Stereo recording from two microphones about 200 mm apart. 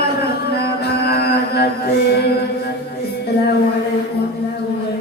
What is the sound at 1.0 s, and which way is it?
Mantra, 50° left (ahead or behind).